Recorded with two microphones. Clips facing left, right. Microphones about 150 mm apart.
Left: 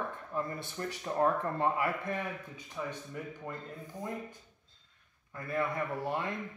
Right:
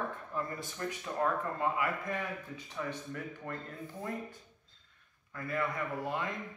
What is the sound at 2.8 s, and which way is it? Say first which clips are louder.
Speech: even; 15° left (ahead or behind).